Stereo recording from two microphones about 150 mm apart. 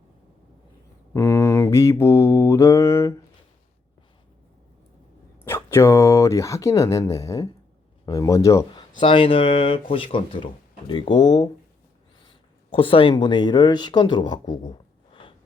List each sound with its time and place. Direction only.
1.1 s mantra: 20° left (ahead or behind)
5.5 s speech: 15° left (ahead or behind)